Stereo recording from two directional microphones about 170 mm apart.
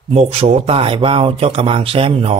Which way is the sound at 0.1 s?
40° right (ahead or behind).